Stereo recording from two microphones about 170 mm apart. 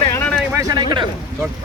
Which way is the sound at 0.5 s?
25° right (ahead or behind).